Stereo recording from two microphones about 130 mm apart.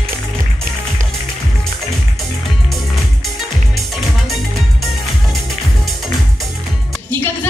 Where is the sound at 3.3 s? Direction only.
Centre (ahead or behind).